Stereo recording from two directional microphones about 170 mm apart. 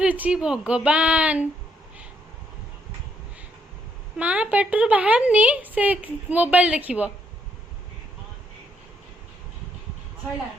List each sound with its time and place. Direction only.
0.0 s a woman's voice: 5° right (ahead or behind)
4.2 s a woman's voice: 10° right (ahead or behind)